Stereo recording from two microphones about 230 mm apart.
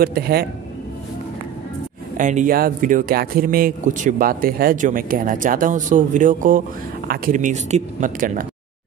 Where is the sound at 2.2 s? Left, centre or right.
Right.